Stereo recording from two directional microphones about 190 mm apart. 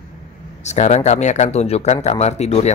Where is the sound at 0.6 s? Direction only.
35° left (ahead or behind).